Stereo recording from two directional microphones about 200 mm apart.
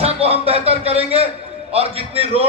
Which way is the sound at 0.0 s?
30° right (ahead or behind).